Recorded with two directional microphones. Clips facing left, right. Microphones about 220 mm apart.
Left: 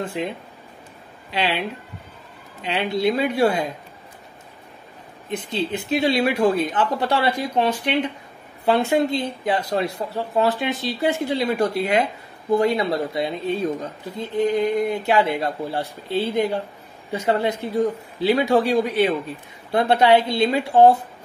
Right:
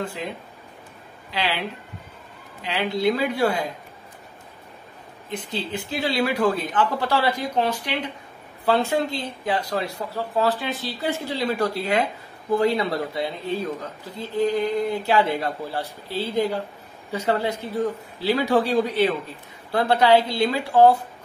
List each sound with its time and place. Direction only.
0.2 s speech: 20° left (ahead or behind)
2.6 s speech: 25° left (ahead or behind)
5.4 s speech: 20° left (ahead or behind)
14.3 s speech: 20° left (ahead or behind)